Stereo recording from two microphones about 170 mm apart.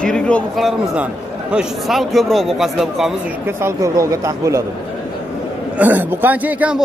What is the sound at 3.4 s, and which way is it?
A man's voice, 15° right (ahead or behind).